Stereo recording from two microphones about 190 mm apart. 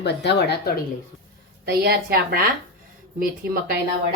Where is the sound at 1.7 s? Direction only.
55° right (ahead or behind).